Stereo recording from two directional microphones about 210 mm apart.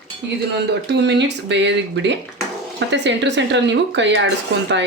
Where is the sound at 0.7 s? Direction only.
55° right (ahead or behind).